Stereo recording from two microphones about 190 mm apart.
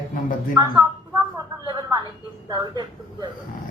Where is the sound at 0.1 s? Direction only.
45° left (ahead or behind).